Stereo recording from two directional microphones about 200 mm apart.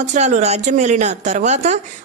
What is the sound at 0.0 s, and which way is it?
A woman's voice, 35° right (ahead or behind).